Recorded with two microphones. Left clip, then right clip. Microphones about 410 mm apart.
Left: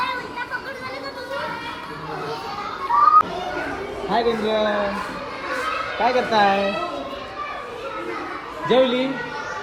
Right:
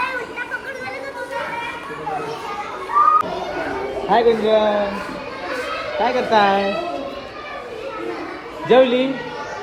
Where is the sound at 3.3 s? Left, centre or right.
Centre.